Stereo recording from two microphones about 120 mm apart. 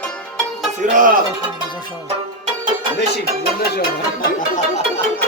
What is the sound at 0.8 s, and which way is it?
Music, 90° right.